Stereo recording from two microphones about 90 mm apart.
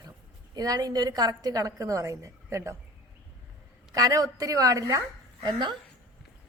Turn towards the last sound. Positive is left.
turn(degrees=-55)  # may be behind; listen again after turning